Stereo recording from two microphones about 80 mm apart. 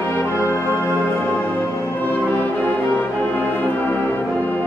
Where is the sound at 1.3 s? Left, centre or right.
Left.